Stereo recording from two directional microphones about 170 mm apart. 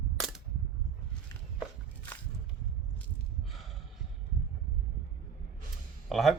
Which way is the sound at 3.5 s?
Centre (ahead or behind).